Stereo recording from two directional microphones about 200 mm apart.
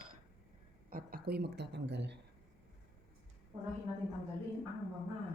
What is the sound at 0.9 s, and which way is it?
Speech, 50° right (ahead or behind).